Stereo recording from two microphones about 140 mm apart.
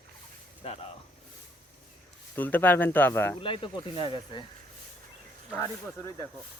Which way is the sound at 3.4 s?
40° left (ahead or behind).